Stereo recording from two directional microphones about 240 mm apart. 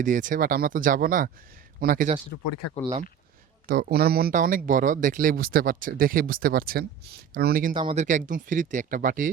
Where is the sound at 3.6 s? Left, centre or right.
Right.